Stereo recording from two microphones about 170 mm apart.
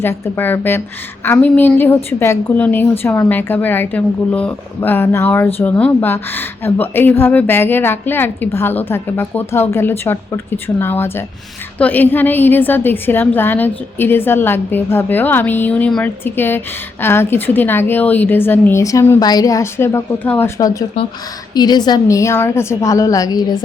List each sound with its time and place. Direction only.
0.0 s a woman's voice: 10° left (ahead or behind)
20.6 s a woman's voice: 20° left (ahead or behind)